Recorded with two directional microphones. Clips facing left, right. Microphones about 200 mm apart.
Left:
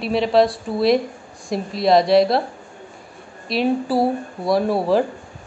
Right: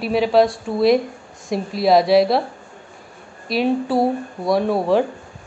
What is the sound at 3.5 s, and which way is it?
A woman's voice, centre (ahead or behind).